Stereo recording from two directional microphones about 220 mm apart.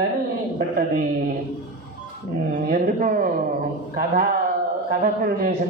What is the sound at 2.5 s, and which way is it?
A man's voice, 40° right (ahead or behind).